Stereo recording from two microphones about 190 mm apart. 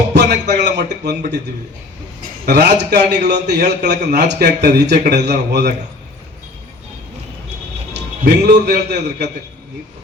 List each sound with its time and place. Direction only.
0.1 s speech: 65° right (ahead or behind)
2.2 s a man's voice: 60° right (ahead or behind)
7.9 s a man's voice: 60° right (ahead or behind)